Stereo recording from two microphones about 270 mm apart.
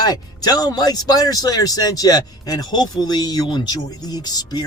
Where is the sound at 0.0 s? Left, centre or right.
Centre.